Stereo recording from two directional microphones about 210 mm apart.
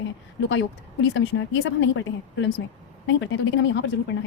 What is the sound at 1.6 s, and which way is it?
Speech, 65° left (ahead or behind).